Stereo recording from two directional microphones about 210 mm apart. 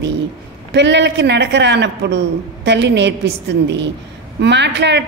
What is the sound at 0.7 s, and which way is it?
A woman's voice, 55° right (ahead or behind).